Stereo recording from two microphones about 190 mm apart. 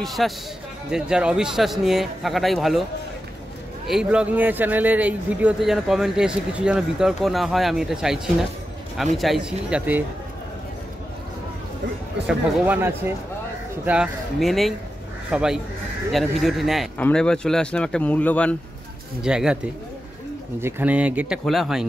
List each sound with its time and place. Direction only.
0.0 s a man's voice: centre (ahead or behind)
3.8 s a man's voice: 5° right (ahead or behind)
12.3 s a man's voice: 10° right (ahead or behind); by 18.6 s 5° left (ahead or behind)
19.2 s a man's voice: 5° right (ahead or behind)
20.6 s speech: 5° right (ahead or behind)